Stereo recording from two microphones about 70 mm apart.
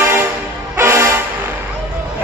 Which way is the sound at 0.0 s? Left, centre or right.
Right.